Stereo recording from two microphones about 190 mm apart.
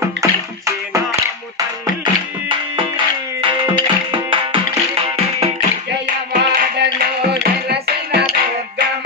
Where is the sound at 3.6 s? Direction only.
25° right (ahead or behind).